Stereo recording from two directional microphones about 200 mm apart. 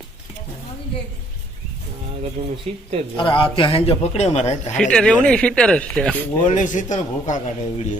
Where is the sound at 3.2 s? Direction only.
25° left (ahead or behind).